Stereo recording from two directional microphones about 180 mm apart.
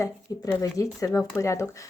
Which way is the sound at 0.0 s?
15° left (ahead or behind).